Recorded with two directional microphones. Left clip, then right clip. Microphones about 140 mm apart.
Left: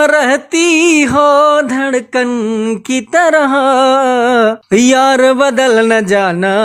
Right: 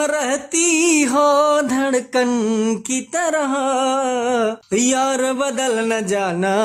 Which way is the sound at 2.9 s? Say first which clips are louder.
Left 13 dB; 40° left (ahead or behind).